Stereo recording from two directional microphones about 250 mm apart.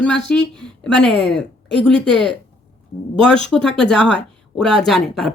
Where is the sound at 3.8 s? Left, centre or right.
Centre.